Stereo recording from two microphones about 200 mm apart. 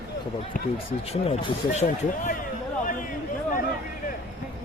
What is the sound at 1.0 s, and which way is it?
Speech, 30° left (ahead or behind).